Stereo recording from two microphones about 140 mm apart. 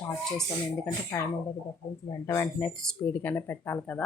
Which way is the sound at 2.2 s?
20° left (ahead or behind).